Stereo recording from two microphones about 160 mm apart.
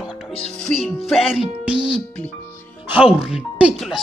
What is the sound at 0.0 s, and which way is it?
Music, 5° right (ahead or behind).